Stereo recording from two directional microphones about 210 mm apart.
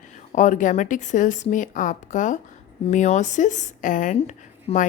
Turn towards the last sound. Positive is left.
turn(degrees=35)  # may be behind; listen again after turning